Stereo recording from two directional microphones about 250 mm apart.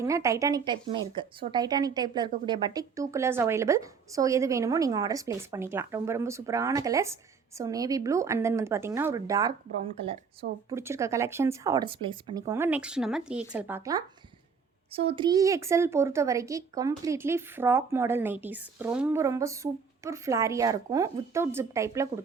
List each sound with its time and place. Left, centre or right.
0.0 s a woman's voice: centre
10.7 s a woman's voice: centre
14.9 s a woman's voice: right